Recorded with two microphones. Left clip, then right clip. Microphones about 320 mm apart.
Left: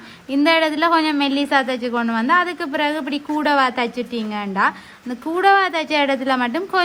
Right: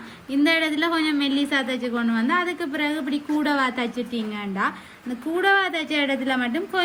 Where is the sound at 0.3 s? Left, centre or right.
Centre.